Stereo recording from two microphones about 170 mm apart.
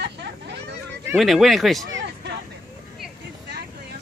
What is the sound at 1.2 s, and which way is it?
Speech, centre (ahead or behind).